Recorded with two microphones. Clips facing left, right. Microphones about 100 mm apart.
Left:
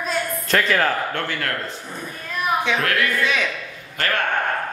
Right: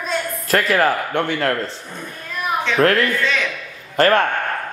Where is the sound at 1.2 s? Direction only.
25° right (ahead or behind).